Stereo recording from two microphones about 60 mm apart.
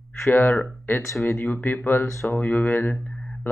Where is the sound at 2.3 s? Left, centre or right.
Left.